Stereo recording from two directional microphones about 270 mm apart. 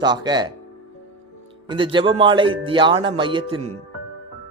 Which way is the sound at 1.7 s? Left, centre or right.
Centre.